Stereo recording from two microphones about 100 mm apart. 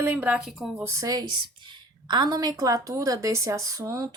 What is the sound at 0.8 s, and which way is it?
A woman's voice, 30° right (ahead or behind).